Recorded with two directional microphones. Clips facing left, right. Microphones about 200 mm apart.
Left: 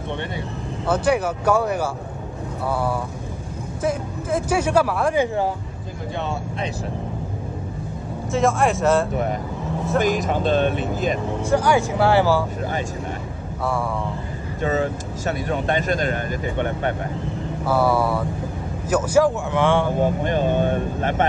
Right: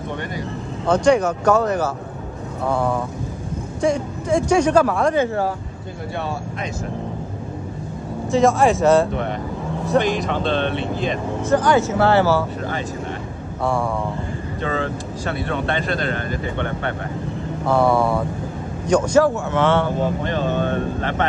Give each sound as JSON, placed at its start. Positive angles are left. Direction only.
{"t": 0.8, "sound": "speech", "side_deg": 5}
{"t": 8.3, "sound": "speech", "side_deg": 0}
{"t": 9.9, "sound": "speech", "side_deg": 45}
{"t": 10.5, "sound": "speech", "side_deg": 5}
{"t": 10.8, "sound": "speech", "side_deg": 45}
{"t": 11.4, "sound": "speech", "side_deg": 10}
{"t": 14.6, "sound": "speech", "side_deg": 10}